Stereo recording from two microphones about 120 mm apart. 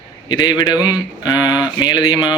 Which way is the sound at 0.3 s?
35° left (ahead or behind).